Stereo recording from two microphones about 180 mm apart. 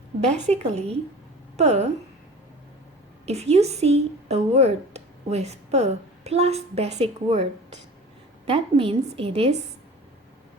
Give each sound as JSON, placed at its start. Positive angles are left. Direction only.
{"t": 0.4, "sound": "a woman's voice", "side_deg": -40}
{"t": 3.2, "sound": "a woman's voice", "side_deg": -35}